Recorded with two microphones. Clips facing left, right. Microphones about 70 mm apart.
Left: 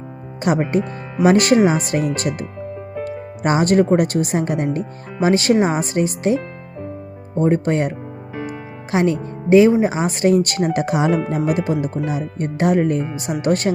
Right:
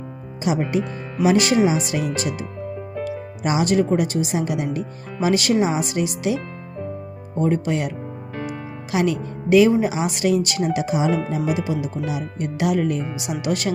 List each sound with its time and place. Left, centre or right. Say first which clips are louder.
0.7 s a woman's voice: left 3 dB; left